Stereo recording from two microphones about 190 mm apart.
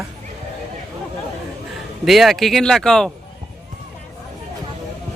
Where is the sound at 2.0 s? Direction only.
Centre (ahead or behind).